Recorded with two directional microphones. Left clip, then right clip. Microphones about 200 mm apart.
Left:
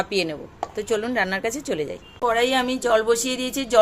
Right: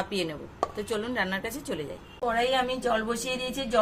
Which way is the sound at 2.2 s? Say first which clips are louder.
Left 5 dB; 65° left (ahead or behind).